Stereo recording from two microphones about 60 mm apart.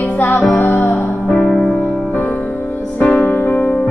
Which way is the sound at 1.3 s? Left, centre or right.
Centre.